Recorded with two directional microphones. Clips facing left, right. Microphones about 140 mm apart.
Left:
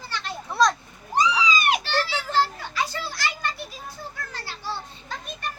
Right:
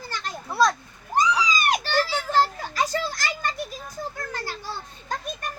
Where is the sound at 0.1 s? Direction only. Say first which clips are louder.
Left 1 dB; 45° right (ahead or behind).